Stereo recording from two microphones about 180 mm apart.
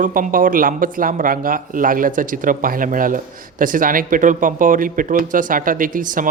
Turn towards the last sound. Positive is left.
turn(degrees=-50)  # may be behind; listen again after turning